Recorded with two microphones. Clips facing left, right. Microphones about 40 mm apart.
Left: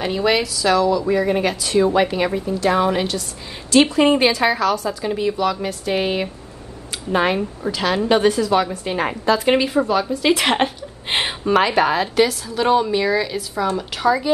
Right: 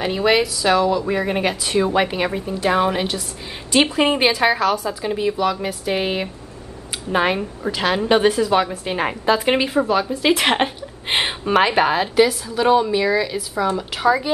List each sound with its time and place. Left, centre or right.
0.0 s a woman's voice: centre
11.4 s a woman's voice: centre